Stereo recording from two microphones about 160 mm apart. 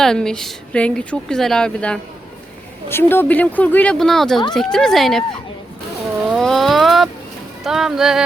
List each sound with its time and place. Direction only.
0.0 s a woman's voice: 5° left (ahead or behind)
6.3 s a woman's voice: centre (ahead or behind)